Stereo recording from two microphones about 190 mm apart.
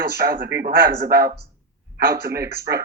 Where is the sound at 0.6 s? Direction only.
50° right (ahead or behind).